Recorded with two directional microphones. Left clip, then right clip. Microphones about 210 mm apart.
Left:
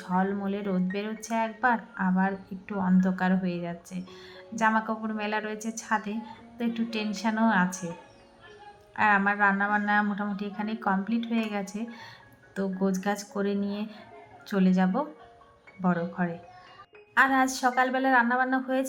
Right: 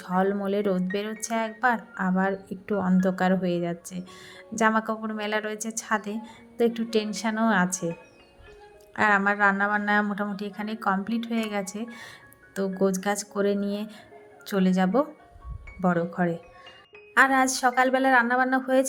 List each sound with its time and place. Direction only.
0.0 s speech: 45° right (ahead or behind)
9.0 s speech: 45° right (ahead or behind)